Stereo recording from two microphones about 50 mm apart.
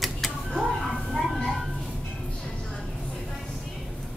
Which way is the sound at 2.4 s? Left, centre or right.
Centre.